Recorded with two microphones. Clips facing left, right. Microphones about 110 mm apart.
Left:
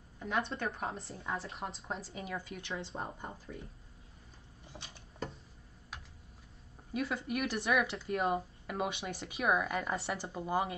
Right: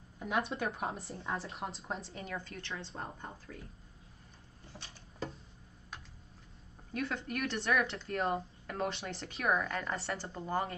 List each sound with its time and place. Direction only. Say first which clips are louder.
0.2 s speech: right 1 dB; 5° right (ahead or behind); by 3.6 s 15° left (ahead or behind)
4.7 s speech: left 1 dB; 15° left (ahead or behind)
6.9 s speech: left 2 dB; 10° left (ahead or behind)